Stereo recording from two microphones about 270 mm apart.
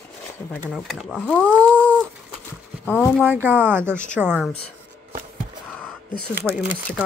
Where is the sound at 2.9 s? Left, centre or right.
Centre.